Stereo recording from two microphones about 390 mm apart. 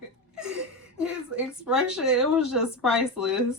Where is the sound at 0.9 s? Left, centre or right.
Centre.